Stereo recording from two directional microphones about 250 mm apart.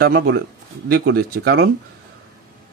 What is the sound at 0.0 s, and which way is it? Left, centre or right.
Speech, right.